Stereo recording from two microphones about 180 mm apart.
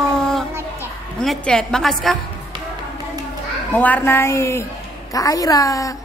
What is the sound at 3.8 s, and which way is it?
A woman's voice, 10° left (ahead or behind).